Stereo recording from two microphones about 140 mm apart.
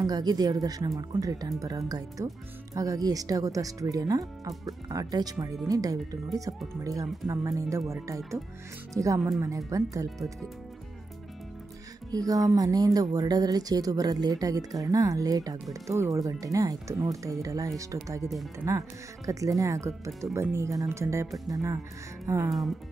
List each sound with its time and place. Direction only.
0.0 s speech: 30° right (ahead or behind)
8.9 s speech: 25° right (ahead or behind)
12.1 s speech: 25° right (ahead or behind)
22.5 s speech: centre (ahead or behind)